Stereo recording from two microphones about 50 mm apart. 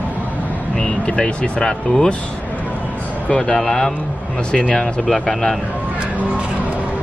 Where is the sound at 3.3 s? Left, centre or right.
Centre.